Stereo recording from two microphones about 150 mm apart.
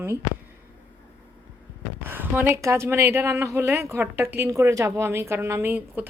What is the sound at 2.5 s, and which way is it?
A woman's voice, 20° right (ahead or behind).